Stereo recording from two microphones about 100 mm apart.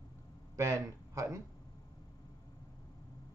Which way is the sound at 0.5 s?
35° right (ahead or behind).